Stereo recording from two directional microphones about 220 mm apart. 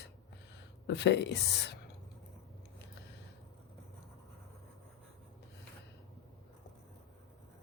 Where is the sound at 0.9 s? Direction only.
50° left (ahead or behind).